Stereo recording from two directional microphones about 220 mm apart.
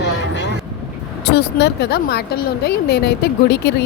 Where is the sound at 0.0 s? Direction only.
50° left (ahead or behind).